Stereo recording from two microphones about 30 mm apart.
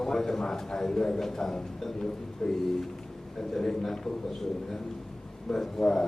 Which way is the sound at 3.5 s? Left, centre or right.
Centre.